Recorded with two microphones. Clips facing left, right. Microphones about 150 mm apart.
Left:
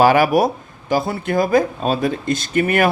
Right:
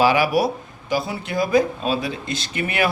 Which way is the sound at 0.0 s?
50° left (ahead or behind).